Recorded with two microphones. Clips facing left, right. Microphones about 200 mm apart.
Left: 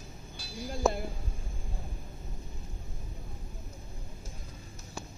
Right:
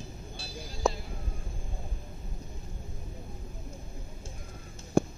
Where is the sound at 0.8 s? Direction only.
Centre (ahead or behind).